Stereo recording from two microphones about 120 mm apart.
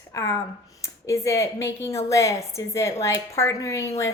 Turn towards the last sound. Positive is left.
turn(degrees=25)  # may be behind; listen again after turning